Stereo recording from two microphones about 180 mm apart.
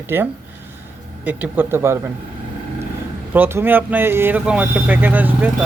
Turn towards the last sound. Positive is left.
turn(degrees=-10)  # may be behind; listen again after turning